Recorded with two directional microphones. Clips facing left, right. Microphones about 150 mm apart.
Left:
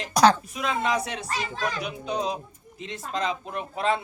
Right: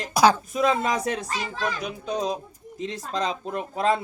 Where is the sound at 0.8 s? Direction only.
45° right (ahead or behind).